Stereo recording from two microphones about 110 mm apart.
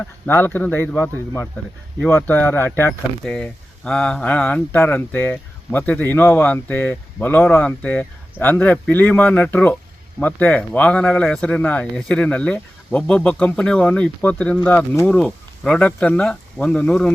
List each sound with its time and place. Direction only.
0.0 s speech: 20° left (ahead or behind)
3.2 s speech: 5° left (ahead or behind)